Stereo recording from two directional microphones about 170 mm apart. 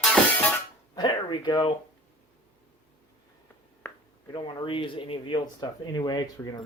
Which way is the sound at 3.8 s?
10° left (ahead or behind).